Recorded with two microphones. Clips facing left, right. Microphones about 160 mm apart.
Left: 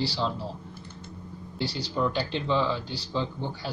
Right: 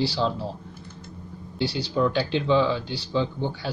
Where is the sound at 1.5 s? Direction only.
65° right (ahead or behind).